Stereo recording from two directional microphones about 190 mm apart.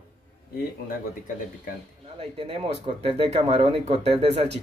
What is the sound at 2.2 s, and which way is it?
Speech, 30° right (ahead or behind).